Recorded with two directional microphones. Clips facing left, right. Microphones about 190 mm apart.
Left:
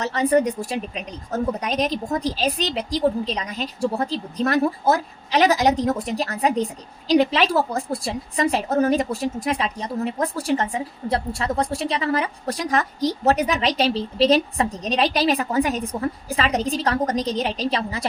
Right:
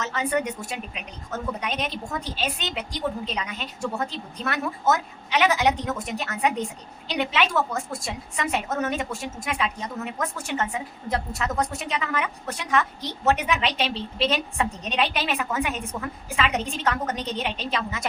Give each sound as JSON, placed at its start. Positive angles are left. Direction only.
{"t": 0.0, "sound": "a woman's voice", "side_deg": 35}